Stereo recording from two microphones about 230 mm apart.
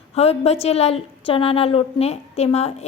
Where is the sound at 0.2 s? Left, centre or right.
Left.